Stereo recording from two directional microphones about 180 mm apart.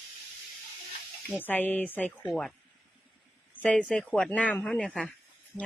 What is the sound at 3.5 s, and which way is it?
Speech, 5° left (ahead or behind).